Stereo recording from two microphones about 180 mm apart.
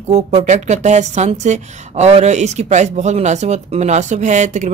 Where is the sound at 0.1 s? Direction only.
40° right (ahead or behind).